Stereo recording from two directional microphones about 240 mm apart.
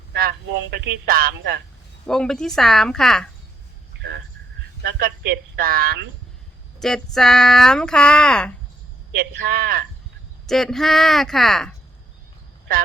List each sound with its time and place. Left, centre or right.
0.1 s speech: right
2.0 s speech: centre
3.9 s a sound: right
4.8 s speech: right
6.8 s speech: centre
9.1 s speech: right
10.4 s speech: centre